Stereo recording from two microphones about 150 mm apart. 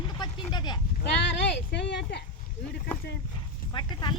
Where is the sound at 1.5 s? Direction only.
90° left.